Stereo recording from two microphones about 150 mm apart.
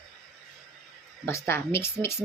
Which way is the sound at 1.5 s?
15° left (ahead or behind).